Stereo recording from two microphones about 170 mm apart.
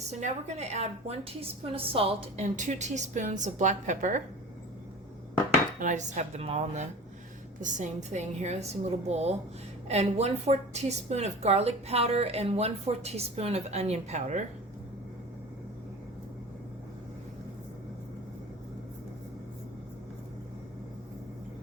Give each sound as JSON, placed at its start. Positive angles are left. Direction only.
{"t": 0.1, "sound": "a woman's voice", "side_deg": -40}
{"t": 5.8, "sound": "a woman's voice", "side_deg": -45}